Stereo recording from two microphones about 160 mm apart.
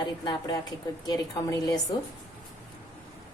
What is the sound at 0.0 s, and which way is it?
A woman's voice, 30° left (ahead or behind).